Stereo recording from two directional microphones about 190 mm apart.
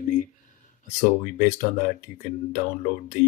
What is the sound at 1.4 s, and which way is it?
Speech, 45° left (ahead or behind).